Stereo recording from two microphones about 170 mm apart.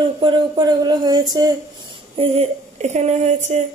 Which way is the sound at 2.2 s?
40° right (ahead or behind).